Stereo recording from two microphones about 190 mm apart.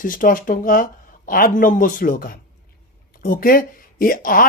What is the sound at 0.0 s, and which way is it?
Speech, 45° left (ahead or behind).